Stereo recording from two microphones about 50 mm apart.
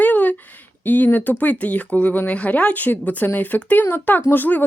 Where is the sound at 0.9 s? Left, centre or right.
Left.